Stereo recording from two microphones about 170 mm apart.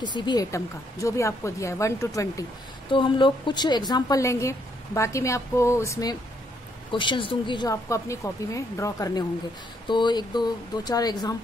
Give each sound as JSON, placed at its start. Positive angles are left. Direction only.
{"t": 0.0, "sound": "a woman's voice", "side_deg": 25}
{"t": 2.9, "sound": "a woman's voice", "side_deg": 30}